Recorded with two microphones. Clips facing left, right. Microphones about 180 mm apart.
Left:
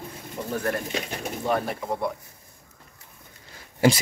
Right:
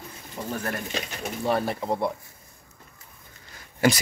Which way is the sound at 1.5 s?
30° right (ahead or behind).